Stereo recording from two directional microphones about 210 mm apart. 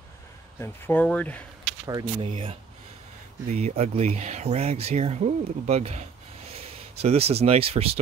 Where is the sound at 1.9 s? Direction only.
20° right (ahead or behind).